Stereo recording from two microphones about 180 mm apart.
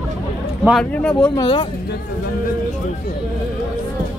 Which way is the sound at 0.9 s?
5° left (ahead or behind).